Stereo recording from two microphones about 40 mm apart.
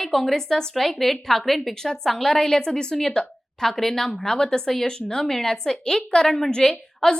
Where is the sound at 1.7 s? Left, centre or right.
Centre.